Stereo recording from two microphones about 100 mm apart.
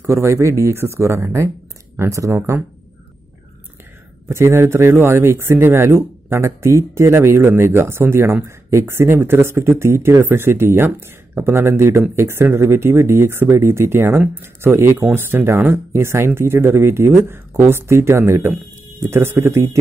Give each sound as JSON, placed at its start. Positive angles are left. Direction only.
{"t": 0.0, "sound": "speech", "side_deg": -25}
{"t": 4.3, "sound": "speech", "side_deg": -25}